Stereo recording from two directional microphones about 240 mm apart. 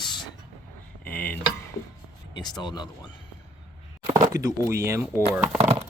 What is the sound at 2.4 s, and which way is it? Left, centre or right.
Speech, centre.